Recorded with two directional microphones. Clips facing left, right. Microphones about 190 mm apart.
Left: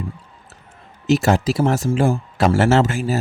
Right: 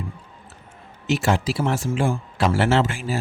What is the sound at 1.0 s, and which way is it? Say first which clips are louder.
Speech: left 5 dB; 40° left (ahead or behind).